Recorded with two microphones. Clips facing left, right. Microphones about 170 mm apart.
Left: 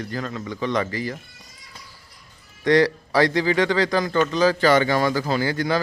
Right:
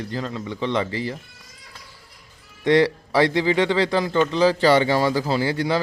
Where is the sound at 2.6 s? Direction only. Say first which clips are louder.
Even; 25° right (ahead or behind).